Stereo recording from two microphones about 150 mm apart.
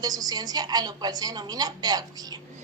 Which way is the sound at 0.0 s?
25° right (ahead or behind).